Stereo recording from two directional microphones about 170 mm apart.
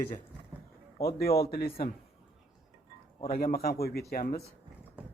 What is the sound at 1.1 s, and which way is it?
Speech, 65° left (ahead or behind).